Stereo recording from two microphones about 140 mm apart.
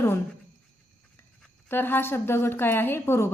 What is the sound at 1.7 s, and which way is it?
A woman's voice, 15° left (ahead or behind).